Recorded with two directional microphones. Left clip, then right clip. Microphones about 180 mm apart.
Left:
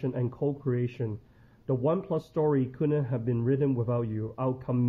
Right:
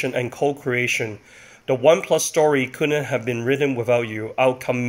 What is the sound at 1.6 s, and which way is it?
Speech, 5° right (ahead or behind).